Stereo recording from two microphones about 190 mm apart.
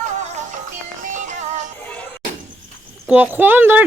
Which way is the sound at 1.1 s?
40° right (ahead or behind).